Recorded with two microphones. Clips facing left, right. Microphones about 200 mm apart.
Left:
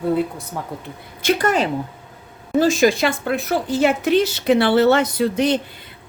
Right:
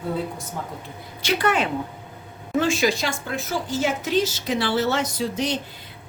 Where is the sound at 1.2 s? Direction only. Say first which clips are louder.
Left 4 dB; 45° left (ahead or behind).